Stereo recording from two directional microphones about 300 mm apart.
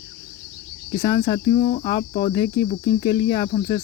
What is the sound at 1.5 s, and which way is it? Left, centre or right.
Cricket, left.